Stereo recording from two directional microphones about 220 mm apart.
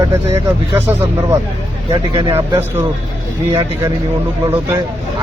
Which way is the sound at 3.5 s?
15° right (ahead or behind).